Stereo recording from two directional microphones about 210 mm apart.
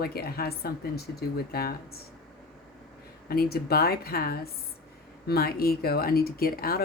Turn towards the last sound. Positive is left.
turn(degrees=45)  # may be behind; listen again after turning